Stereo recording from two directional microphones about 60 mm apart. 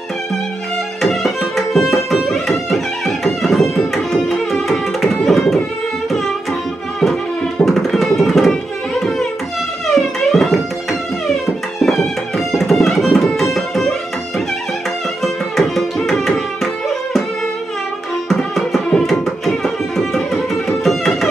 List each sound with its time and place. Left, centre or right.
1.0 s tabla: centre
2.2 s music: centre
6.0 s classical music: centre
7.0 s music: centre
9.8 s music: centre
15.2 s tabla: centre
18.3 s tabla: centre